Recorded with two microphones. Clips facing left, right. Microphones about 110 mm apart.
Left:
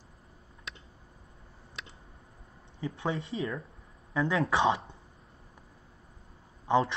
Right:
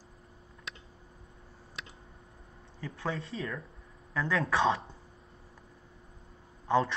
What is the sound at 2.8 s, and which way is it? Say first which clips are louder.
Speech: left 3 dB; 20° left (ahead or behind).